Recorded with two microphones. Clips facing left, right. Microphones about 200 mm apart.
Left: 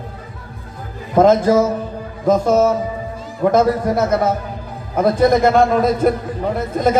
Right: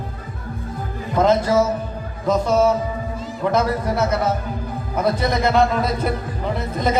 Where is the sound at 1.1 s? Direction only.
50° left (ahead or behind).